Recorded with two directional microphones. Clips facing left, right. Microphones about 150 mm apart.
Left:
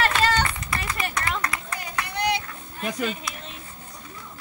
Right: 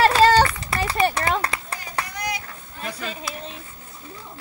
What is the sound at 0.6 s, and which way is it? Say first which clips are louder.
Clapping: right 8 dB; 30° right (ahead or behind).